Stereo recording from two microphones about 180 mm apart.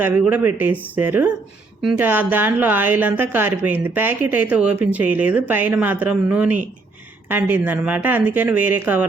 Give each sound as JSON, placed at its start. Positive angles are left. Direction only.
{"t": 0.0, "sound": "a woman's voice", "side_deg": -10}